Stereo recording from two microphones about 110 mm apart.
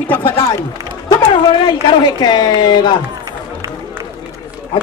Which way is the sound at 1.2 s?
40° left (ahead or behind).